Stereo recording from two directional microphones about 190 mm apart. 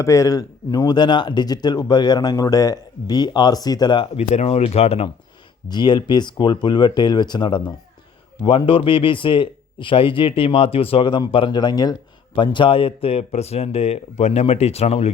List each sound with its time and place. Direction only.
0.0 s a man's voice: 15° left (ahead or behind)
4.3 s a man's voice: 35° left (ahead or behind)